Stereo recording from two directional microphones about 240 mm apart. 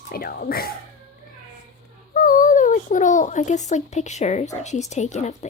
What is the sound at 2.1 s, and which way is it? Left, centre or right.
Speech, left.